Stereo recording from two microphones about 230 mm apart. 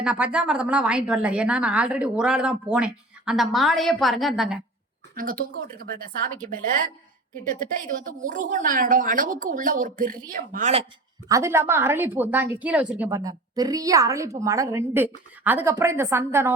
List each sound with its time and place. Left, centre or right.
0.0 s a woman's voice: centre
5.1 s a woman's voice: right
11.3 s a woman's voice: centre